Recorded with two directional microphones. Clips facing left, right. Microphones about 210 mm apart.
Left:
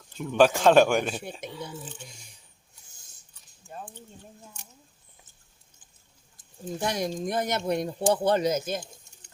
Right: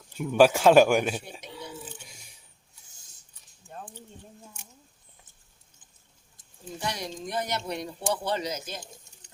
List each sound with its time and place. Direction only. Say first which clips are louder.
0.1 s a man's voice: right 1 dB; 10° right (ahead or behind)
3.7 s a sound: left 2 dB; 5° left (ahead or behind)
6.7 s speech: left 5 dB; 50° left (ahead or behind)